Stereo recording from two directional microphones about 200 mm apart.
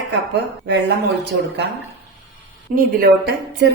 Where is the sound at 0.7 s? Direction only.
55° right (ahead or behind).